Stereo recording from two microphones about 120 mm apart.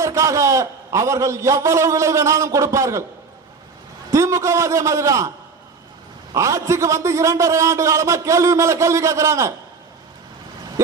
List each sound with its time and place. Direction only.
0.0 s a man's voice: 25° right (ahead or behind)
4.1 s a man's voice: 25° right (ahead or behind)
6.3 s a man's voice: 25° right (ahead or behind)
10.8 s a sound: 25° right (ahead or behind)